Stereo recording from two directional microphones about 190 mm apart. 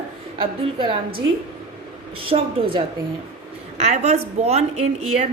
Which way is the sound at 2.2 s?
30° right (ahead or behind).